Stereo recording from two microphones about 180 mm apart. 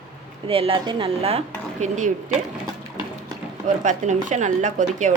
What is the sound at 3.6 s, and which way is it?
Speech, 40° right (ahead or behind).